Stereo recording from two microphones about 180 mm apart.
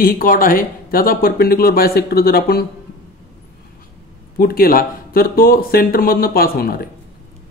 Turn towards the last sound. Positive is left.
turn(degrees=55)  # may be behind; listen again after turning